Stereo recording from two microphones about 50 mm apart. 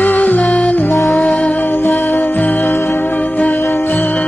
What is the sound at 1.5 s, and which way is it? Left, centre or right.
Music, left.